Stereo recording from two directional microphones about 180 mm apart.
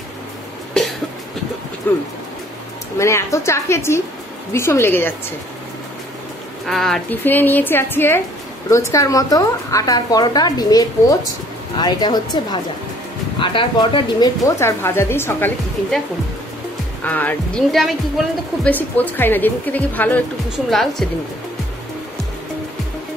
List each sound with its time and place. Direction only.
1.8 s speech: 10° left (ahead or behind)
6.7 s a woman's voice: centre (ahead or behind); by 14.3 s 25° left (ahead or behind)
14.6 s speech: 15° left (ahead or behind)
17.0 s speech: 10° left (ahead or behind)